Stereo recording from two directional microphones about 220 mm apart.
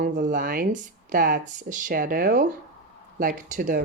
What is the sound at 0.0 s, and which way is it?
Speech, 35° right (ahead or behind).